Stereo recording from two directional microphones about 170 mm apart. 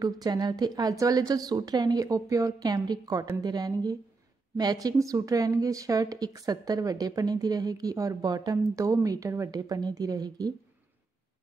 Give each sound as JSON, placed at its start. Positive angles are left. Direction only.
{"t": 0.0, "sound": "a woman's voice", "side_deg": -20}